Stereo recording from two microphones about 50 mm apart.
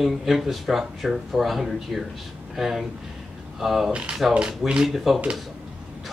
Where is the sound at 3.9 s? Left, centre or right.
Right.